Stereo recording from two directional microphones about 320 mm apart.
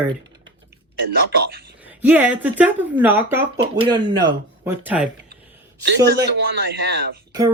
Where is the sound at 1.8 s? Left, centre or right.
Centre.